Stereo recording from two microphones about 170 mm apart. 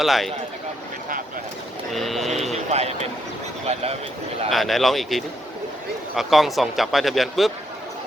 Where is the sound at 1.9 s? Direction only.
Centre (ahead or behind).